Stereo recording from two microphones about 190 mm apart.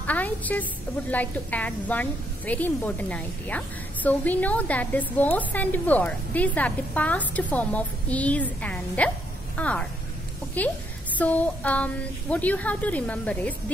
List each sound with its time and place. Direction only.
0.0 s a woman's voice: 10° left (ahead or behind)